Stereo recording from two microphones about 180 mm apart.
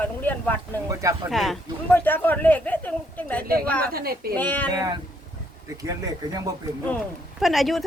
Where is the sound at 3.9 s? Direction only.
55° right (ahead or behind).